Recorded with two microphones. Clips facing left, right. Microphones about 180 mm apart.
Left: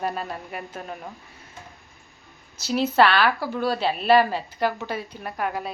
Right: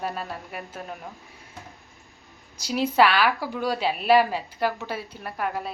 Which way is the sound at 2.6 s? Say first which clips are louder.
Left 1 dB; 10° right (ahead or behind).